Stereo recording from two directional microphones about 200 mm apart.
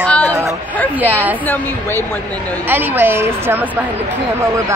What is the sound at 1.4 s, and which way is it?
Speech, 10° left (ahead or behind).